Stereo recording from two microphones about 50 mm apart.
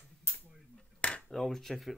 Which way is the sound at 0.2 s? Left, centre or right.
Right.